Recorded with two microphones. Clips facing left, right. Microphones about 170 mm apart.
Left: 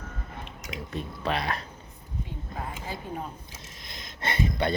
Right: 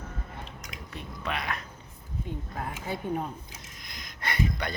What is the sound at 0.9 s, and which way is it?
Speech, 35° left (ahead or behind).